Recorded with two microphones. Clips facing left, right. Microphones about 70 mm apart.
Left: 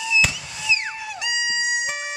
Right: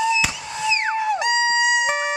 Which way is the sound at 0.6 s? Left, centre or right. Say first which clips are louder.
Right 6 dB; right.